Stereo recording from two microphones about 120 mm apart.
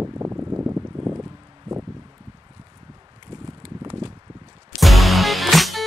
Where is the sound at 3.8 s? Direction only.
35° right (ahead or behind).